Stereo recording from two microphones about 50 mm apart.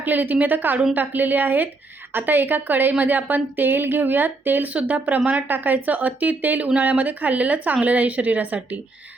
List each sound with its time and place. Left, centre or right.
0.0 s speech: right
4.7 s speech: right